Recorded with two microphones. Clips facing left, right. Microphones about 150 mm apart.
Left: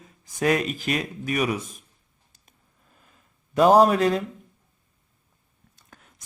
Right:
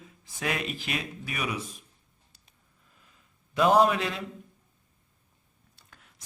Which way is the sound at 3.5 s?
40° left (ahead or behind).